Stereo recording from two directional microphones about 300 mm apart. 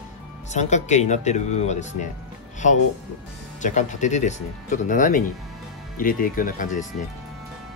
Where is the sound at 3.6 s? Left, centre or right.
Left.